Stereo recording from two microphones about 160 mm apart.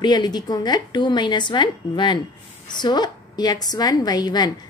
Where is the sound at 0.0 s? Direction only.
25° left (ahead or behind).